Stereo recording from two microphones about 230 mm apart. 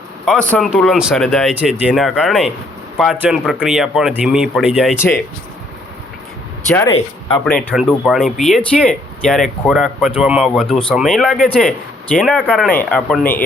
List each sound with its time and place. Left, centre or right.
0.3 s speech: centre
4.9 s speech: centre
6.7 s speech: centre